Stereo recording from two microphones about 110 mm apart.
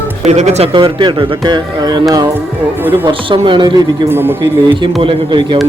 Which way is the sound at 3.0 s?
50° right (ahead or behind).